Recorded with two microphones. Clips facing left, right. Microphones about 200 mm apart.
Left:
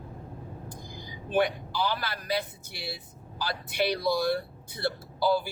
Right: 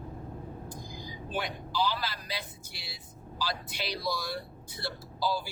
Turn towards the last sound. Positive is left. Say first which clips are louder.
# left 6 dB
turn(degrees=60)  # may be behind; listen again after turning